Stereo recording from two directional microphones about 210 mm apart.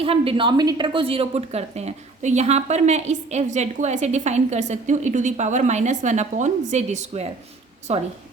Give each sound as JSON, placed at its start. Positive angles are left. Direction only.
{"t": 0.0, "sound": "a woman's voice", "side_deg": -25}